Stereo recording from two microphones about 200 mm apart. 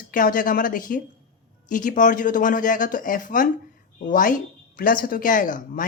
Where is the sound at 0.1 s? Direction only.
40° left (ahead or behind).